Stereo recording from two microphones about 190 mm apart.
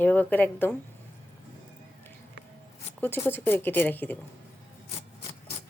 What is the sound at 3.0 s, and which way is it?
A woman's voice, 10° left (ahead or behind).